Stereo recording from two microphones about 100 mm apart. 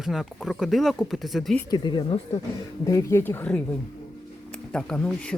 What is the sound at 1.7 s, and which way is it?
Speech, 50° left (ahead or behind).